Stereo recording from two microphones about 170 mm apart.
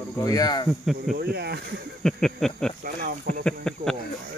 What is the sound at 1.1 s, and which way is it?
Speech, 70° right (ahead or behind).